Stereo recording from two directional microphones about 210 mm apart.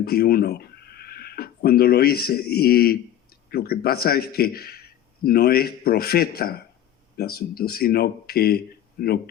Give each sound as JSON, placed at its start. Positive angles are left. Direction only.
{"t": 0.0, "sound": "speech", "side_deg": 45}